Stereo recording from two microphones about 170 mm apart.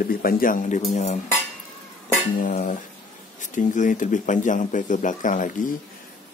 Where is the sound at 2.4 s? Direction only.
50° left (ahead or behind).